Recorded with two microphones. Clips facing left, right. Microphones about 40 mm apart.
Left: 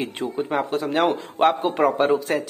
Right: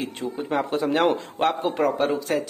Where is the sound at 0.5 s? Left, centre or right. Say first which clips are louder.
Right 3 dB; centre.